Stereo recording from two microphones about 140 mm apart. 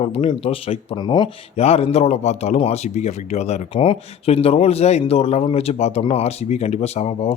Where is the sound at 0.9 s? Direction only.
30° left (ahead or behind).